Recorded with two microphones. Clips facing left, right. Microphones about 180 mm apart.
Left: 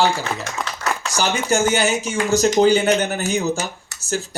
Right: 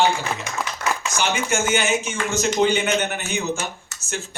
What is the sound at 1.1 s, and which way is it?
A woman's voice, 35° left (ahead or behind).